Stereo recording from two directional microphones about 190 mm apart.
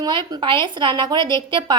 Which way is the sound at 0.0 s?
25° right (ahead or behind).